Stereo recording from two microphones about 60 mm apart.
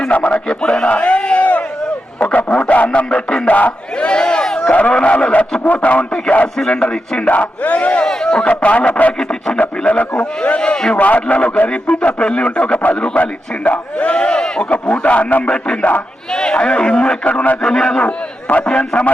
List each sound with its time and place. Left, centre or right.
0.1 s a man's voice: left
0.3 s a man's voice: centre
2.2 s radio: left
4.0 s a sound: centre
4.7 s a man's voice: left
6.6 s a man's voice: centre
17.6 s a man's voice: centre
18.0 s a man's voice: left
18.6 s a man's voice: left